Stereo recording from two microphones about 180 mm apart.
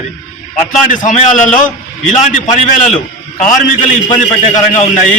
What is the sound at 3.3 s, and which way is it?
A man's voice, 45° left (ahead or behind).